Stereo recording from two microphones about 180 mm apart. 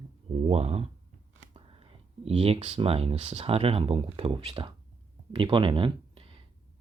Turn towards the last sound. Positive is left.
turn(degrees=-30)  # may be behind; listen again after turning